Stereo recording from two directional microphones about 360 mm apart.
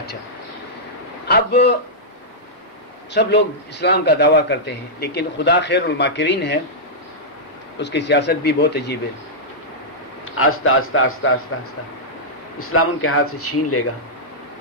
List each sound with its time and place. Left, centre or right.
1.2 s a sound: left
3.1 s a man's voice: left
7.8 s a man's voice: left
10.3 s speech: left
12.5 s speech: left